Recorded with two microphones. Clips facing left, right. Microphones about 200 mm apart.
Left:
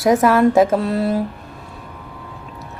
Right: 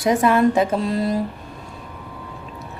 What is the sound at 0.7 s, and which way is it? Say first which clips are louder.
Mantra: left 3 dB; 65° left (ahead or behind).